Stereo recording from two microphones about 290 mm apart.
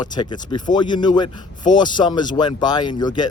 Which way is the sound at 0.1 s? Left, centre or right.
Centre.